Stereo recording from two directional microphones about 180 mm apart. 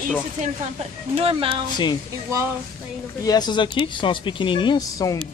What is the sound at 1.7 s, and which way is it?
Speech, 25° left (ahead or behind).